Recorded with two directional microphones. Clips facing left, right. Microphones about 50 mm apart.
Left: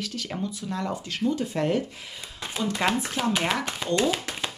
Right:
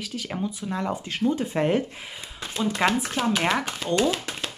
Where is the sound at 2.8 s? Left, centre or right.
Centre.